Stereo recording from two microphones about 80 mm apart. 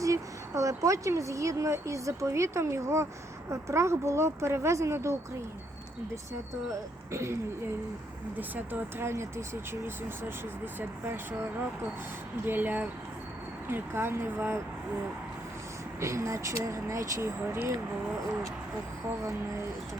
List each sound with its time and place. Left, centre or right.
0.0 s speech: right
6.7 s speech: right
8.4 s speech: right
10.8 s speech: right
12.5 s speech: right
16.0 s speech: right